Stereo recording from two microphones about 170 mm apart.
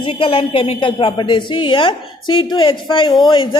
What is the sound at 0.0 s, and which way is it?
A woman's voice, 30° left (ahead or behind).